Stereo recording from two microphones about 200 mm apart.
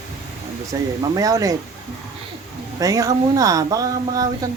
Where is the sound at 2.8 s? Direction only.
15° right (ahead or behind).